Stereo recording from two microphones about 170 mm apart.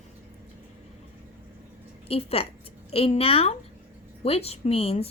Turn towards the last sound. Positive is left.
turn(degrees=35)  # may be behind; listen again after turning